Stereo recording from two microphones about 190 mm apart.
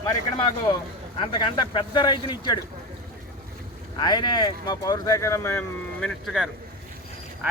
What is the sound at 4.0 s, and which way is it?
Speech, 20° left (ahead or behind).